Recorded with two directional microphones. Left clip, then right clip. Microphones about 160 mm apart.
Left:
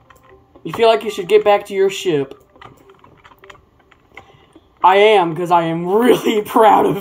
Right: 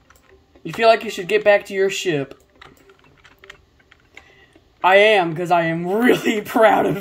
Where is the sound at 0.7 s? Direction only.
50° right (ahead or behind).